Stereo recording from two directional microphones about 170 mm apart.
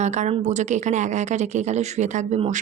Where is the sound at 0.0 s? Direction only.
45° right (ahead or behind).